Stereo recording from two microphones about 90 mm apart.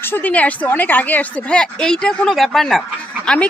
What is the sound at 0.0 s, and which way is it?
A woman's voice, 20° left (ahead or behind).